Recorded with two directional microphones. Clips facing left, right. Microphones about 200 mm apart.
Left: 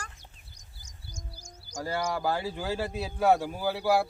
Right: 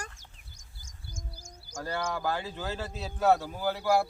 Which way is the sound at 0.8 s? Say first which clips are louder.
Right 1 dB; 50° right (ahead or behind).